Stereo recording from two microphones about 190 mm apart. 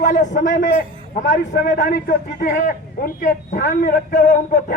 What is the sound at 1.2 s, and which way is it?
Speech, 65° left (ahead or behind).